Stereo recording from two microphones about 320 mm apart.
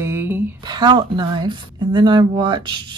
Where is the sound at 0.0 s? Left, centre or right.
Centre.